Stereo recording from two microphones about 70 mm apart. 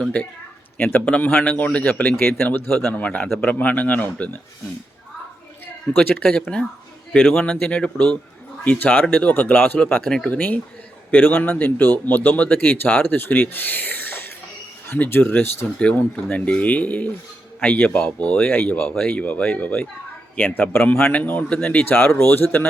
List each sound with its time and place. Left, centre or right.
0.0 s speech: centre
0.8 s speech: left
5.9 s speech: left
7.4 s speech: centre
21.9 s speech: left